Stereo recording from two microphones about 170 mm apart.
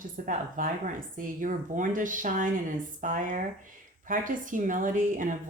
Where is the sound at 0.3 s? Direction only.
50° right (ahead or behind).